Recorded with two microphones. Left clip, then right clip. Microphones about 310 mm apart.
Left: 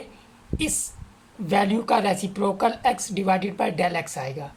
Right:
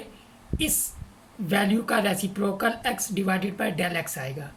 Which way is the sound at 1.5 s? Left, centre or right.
Centre.